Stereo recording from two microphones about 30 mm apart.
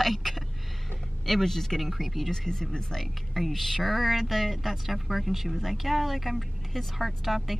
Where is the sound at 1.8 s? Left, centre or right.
Centre.